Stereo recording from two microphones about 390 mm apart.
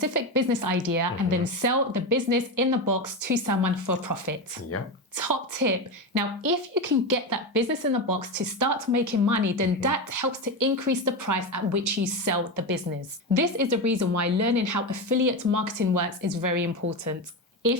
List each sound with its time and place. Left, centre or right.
0.0 s a woman's voice: right